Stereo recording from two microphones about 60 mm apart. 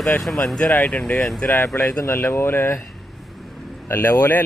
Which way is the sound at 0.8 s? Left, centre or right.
Left.